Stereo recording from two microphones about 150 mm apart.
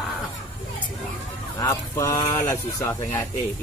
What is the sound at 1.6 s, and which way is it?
Speech, 20° left (ahead or behind).